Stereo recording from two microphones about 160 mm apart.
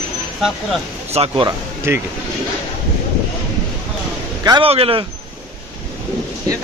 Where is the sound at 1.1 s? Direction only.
35° right (ahead or behind).